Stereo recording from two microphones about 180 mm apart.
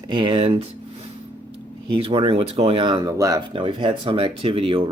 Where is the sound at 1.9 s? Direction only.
30° right (ahead or behind).